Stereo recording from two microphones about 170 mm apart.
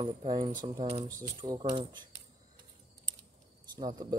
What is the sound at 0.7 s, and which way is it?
Speech, 35° right (ahead or behind).